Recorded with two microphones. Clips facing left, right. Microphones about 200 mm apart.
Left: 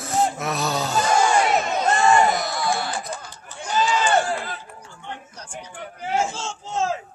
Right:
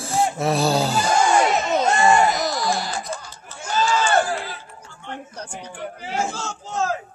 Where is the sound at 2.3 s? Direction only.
55° left (ahead or behind).